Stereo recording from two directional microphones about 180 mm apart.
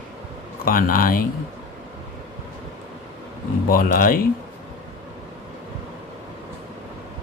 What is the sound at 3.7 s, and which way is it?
Speech, 50° left (ahead or behind).